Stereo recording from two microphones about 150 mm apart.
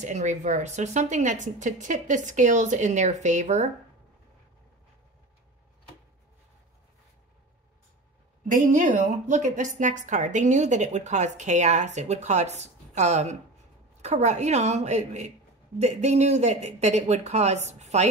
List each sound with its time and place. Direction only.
0.0 s a woman's voice: 55° right (ahead or behind)
8.5 s a woman's voice: 55° right (ahead or behind)